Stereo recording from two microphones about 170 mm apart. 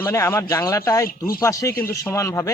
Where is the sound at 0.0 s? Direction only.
15° left (ahead or behind).